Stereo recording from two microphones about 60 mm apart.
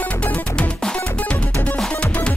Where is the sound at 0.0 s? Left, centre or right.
Left.